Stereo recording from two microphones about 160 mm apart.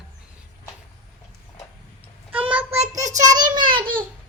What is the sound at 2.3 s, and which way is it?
Child singing, 35° right (ahead or behind).